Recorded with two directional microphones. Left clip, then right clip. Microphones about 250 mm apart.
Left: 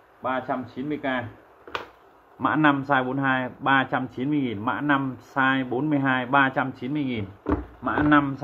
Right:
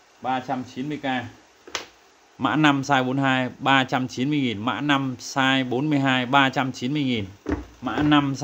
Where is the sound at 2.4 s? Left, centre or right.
Right.